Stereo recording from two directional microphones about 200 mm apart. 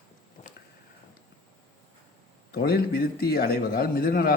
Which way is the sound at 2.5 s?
50° left (ahead or behind).